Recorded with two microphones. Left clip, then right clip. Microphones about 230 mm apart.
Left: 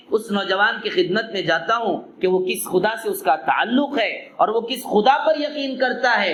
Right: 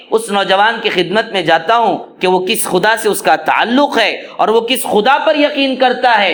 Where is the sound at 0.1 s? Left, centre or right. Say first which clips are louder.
Right 9 dB; right.